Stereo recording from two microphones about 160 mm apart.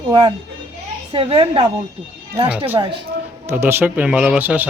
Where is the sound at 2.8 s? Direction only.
35° right (ahead or behind).